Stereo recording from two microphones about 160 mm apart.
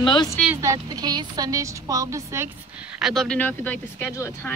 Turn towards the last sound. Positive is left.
turn(degrees=10)  # may be behind; listen again after turning